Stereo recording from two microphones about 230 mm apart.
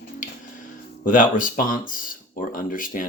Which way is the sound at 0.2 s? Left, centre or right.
Left.